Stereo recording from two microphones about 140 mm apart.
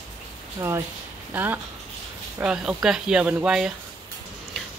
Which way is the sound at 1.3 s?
15° right (ahead or behind).